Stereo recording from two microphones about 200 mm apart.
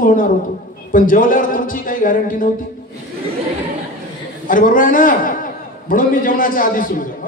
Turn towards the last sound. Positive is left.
turn(degrees=45)  # may be behind; listen again after turning